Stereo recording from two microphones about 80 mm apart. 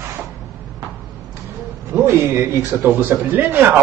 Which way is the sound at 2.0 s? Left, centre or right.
Right.